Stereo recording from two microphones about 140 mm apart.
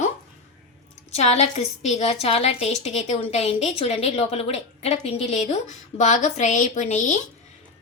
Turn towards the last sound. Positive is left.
turn(degrees=60)  # may be behind; listen again after turning